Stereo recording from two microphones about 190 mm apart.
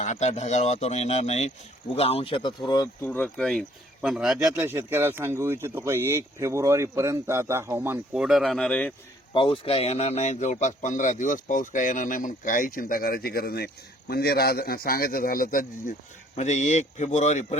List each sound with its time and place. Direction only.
0.0 s speech: 40° left (ahead or behind); by 3.1 s 20° left (ahead or behind)
3.1 s speech: 5° left (ahead or behind)
9.3 s a man's voice: 30° left (ahead or behind)